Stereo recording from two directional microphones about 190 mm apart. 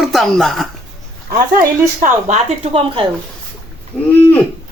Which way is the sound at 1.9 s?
40° right (ahead or behind).